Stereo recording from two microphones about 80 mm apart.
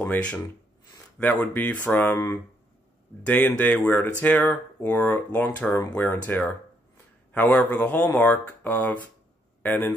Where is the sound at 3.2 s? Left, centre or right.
Left.